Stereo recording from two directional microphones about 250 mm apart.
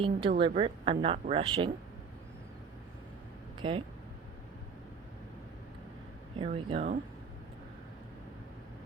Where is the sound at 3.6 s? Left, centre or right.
Right.